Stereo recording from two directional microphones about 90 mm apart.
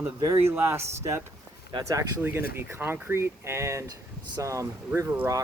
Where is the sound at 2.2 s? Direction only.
25° right (ahead or behind).